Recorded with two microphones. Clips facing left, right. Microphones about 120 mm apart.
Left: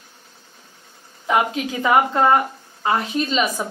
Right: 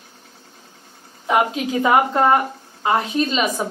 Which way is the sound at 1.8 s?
20° right (ahead or behind).